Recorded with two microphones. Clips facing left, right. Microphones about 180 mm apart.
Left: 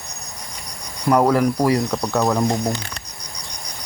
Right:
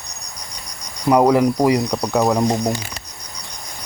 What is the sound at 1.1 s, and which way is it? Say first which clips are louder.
Speech: right 2 dB; 15° right (ahead or behind).